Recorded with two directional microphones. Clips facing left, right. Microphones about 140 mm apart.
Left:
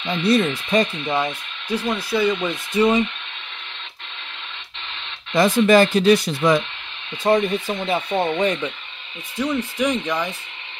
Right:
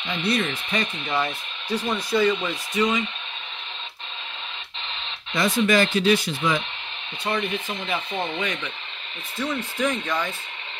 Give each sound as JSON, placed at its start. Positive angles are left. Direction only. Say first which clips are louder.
{"t": 0.0, "sound": "speech", "louder": "left 6 dB", "side_deg": 35}
{"t": 1.0, "sound": "speech", "louder": "left 3 dB", "side_deg": 20}
{"t": 2.4, "sound": "speech", "louder": "left 5 dB", "side_deg": 30}
{"t": 5.3, "sound": "speech", "louder": "left 6 dB", "side_deg": 40}
{"t": 9.4, "sound": "speech", "louder": "left 4 dB", "side_deg": 15}